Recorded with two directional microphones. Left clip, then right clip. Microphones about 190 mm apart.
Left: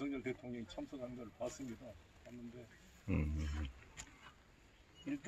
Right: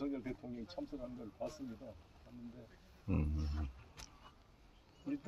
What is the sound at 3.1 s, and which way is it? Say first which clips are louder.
Speech: right 1 dB; centre (ahead or behind).